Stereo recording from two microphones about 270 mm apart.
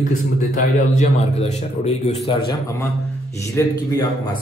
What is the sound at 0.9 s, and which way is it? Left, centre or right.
A man's voice, left.